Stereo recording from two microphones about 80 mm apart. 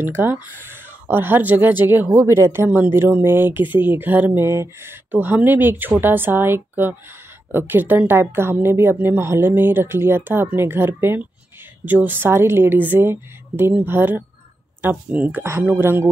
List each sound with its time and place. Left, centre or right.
0.0 s a woman's voice: right
2.0 s a woman's voice: right
4.5 s speech: right
5.1 s a woman's voice: right